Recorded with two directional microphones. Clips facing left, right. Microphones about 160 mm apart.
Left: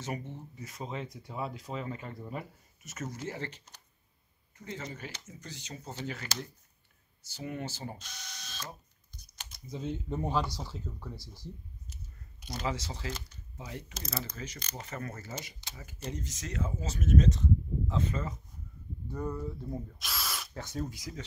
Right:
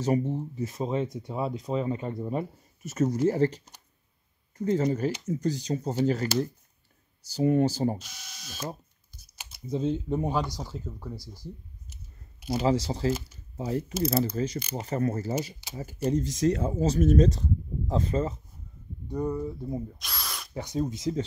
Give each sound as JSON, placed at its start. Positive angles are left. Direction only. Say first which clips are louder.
{"t": 0.0, "sound": "speech", "louder": "right 13 dB", "side_deg": -35}
{"t": 7.2, "sound": "speech", "louder": "right 15 dB", "side_deg": -35}
{"t": 8.0, "sound": "drill", "louder": "even", "side_deg": -10}
{"t": 9.7, "sound": "speech", "louder": "right 9 dB", "side_deg": -25}
{"t": 10.1, "sound": "speech", "louder": "right 4 dB", "side_deg": -15}
{"t": 12.4, "sound": "a sound", "louder": "right 12 dB", "side_deg": -5}
{"t": 12.6, "sound": "speech", "louder": "right 11 dB", "side_deg": -35}
{"t": 19.0, "sound": "speech", "louder": "right 6 dB", "side_deg": -15}
{"t": 20.0, "sound": "drill", "louder": "even", "side_deg": 0}
{"t": 20.5, "sound": "speech", "louder": "right 10 dB", "side_deg": -15}